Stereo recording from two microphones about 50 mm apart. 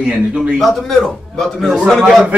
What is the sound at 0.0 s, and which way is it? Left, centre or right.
Speech, centre.